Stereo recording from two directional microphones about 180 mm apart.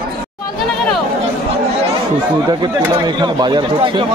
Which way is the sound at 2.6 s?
25° right (ahead or behind).